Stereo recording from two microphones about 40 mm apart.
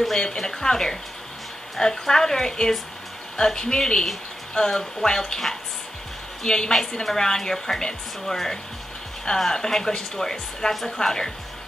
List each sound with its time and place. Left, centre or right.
0.2 s speech: centre
6.4 s speech: left